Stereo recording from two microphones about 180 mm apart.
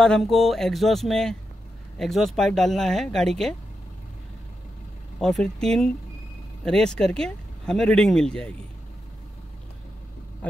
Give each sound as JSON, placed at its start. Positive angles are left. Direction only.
{"t": 0.0, "sound": "speech", "side_deg": 0}
{"t": 5.2, "sound": "speech", "side_deg": 5}